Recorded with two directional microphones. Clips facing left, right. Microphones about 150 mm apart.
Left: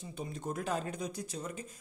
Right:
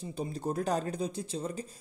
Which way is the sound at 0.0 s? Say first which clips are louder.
Right 5 dB; 35° right (ahead or behind).